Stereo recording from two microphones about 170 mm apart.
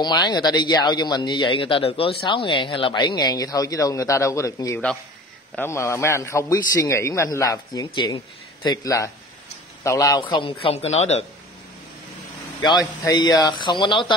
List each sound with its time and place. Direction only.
0.0 s a man's voice: 25° left (ahead or behind)
10.2 s a woman's voice: 30° left (ahead or behind)
12.6 s speech: 25° left (ahead or behind)